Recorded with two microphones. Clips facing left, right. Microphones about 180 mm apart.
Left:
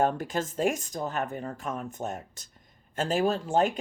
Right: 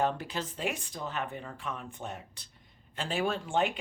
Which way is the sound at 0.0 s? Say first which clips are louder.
Left 4 dB; 45° left (ahead or behind).